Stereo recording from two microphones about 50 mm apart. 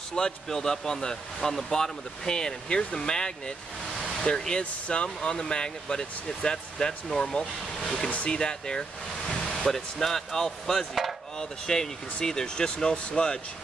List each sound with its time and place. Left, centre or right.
0.1 s speech: centre